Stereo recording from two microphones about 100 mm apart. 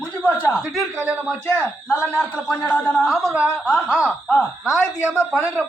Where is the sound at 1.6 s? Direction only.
15° left (ahead or behind).